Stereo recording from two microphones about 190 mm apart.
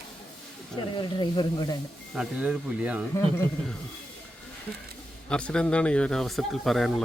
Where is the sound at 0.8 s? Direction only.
25° left (ahead or behind).